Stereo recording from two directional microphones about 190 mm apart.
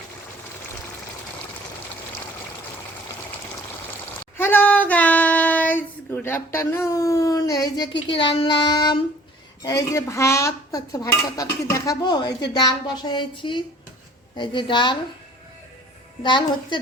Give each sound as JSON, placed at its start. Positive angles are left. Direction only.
{"t": 4.4, "sound": "a woman's voice", "side_deg": 10}
{"t": 9.6, "sound": "dishes", "side_deg": 15}
{"t": 11.7, "sound": "a woman's voice", "side_deg": 20}
{"t": 16.2, "sound": "a woman's voice", "side_deg": 25}